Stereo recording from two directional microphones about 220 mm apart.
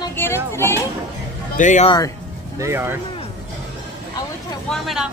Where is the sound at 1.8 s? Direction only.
20° left (ahead or behind).